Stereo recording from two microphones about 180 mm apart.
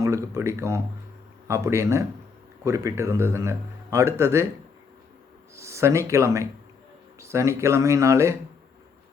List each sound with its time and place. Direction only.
0.0 s speech: 15° right (ahead or behind)
5.5 s speech: 15° right (ahead or behind)